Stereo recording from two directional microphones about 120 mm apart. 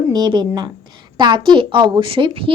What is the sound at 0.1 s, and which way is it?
A child's voice, 35° right (ahead or behind).